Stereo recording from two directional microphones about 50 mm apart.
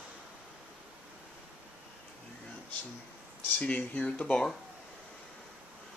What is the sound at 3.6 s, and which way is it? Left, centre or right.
Speech, left.